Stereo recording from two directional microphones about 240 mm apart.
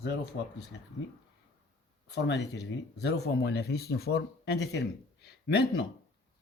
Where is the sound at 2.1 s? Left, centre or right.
Left.